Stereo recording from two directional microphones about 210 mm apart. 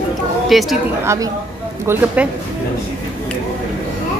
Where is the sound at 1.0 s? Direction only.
15° right (ahead or behind).